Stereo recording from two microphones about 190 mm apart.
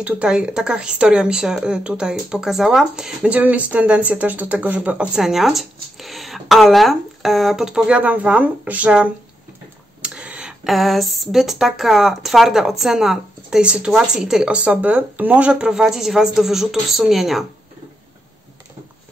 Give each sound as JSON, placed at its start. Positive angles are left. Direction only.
{"t": 0.0, "sound": "speech", "side_deg": -5}